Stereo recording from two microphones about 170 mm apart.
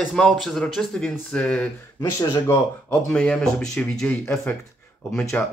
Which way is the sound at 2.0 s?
20° left (ahead or behind).